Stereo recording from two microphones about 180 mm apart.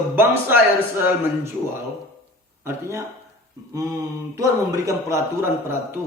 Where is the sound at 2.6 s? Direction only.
15° right (ahead or behind).